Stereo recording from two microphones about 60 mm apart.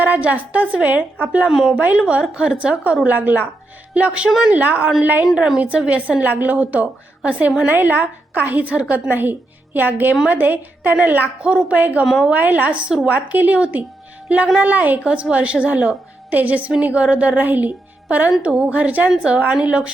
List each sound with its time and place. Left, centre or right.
0.0 s a woman's voice: right
1.5 s a woman's voice: centre; by 4.9 s right
5.2 s a woman's voice: centre
5.5 s a woman's voice: right
12.0 s a woman's voice: centre
12.3 s a woman's voice: right